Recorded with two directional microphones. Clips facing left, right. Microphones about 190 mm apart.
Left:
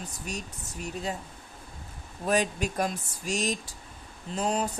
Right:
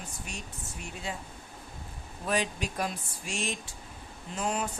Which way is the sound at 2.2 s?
45° left (ahead or behind).